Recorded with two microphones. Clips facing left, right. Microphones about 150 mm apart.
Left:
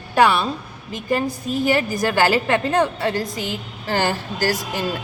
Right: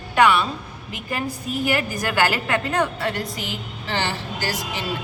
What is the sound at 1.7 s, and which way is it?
A woman's voice, 30° left (ahead or behind).